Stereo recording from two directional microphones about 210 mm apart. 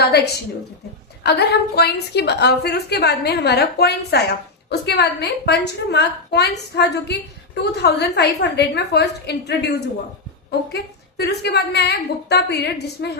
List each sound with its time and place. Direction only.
0.0 s a woman's voice: 50° left (ahead or behind)
11.2 s a woman's voice: 50° left (ahead or behind)